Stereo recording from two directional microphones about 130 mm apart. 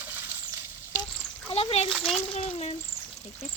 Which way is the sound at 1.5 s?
55° left (ahead or behind).